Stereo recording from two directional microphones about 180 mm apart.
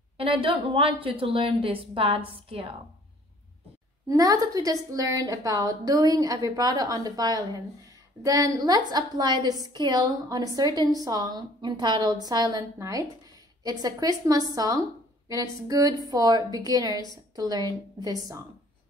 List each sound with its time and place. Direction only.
0.2 s a woman's voice: 30° right (ahead or behind)
4.1 s a woman's voice: 20° right (ahead or behind)